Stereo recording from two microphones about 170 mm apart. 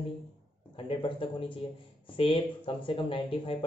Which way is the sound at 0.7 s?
30° left (ahead or behind).